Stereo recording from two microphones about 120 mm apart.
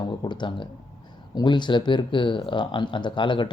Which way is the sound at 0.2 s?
40° left (ahead or behind).